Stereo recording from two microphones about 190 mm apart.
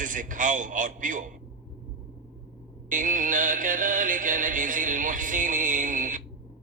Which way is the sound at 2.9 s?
45° right (ahead or behind).